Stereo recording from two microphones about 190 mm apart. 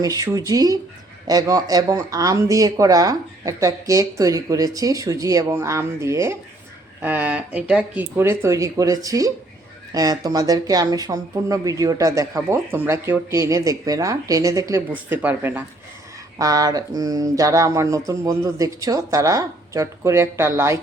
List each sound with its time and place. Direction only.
0.0 s speech: 20° right (ahead or behind)